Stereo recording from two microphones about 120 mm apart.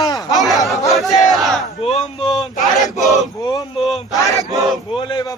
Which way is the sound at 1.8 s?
55° left (ahead or behind).